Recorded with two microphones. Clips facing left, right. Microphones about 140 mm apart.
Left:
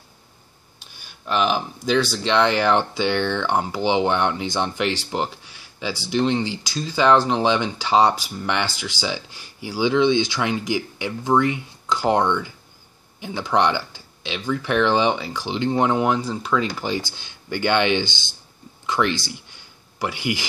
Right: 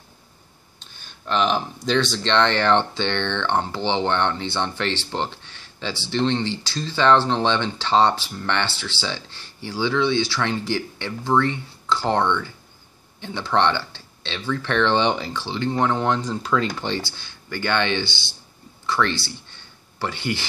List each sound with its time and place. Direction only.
0.7 s speech: 10° left (ahead or behind)
15.4 s speech: 15° left (ahead or behind)